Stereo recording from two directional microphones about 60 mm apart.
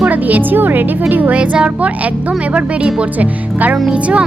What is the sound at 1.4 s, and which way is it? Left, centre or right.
Speech, centre.